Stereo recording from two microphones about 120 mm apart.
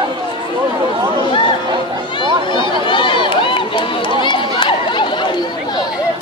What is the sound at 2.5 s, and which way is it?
Run, 40° left (ahead or behind).